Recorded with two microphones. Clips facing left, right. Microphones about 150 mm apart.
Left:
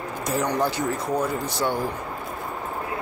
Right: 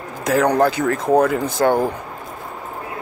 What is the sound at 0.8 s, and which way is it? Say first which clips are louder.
Speech: right 9 dB; 70° right (ahead or behind).